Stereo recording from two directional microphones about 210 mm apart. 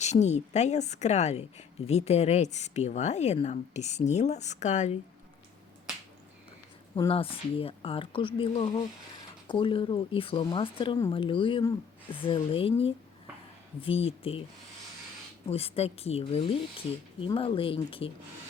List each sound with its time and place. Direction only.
0.0 s a woman's voice: 30° left (ahead or behind)
6.9 s speech: 25° left (ahead or behind)
15.4 s speech: 30° left (ahead or behind)